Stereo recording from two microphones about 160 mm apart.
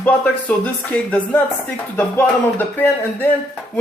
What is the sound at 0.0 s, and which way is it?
A man's voice, 10° left (ahead or behind).